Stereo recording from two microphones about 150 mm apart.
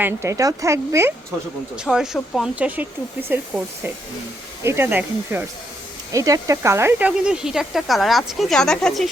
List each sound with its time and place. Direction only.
0.0 s speech: 20° right (ahead or behind)
1.7 s speech: 5° right (ahead or behind)
2.6 s speech: 10° right (ahead or behind)
4.6 s speech: 15° right (ahead or behind)
6.1 s speech: 25° right (ahead or behind)
7.3 s speech: 5° right (ahead or behind)